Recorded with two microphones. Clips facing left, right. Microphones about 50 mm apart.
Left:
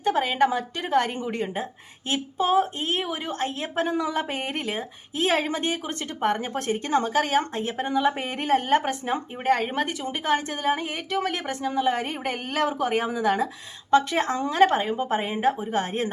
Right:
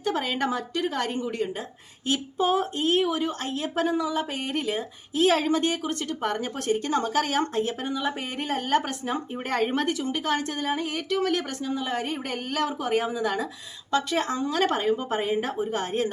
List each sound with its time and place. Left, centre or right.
0.0 s speech: centre; by 4.3 s left
4.3 s speech: left
9.5 s speech: centre
11.6 s a woman's voice: left
14.7 s speech: centre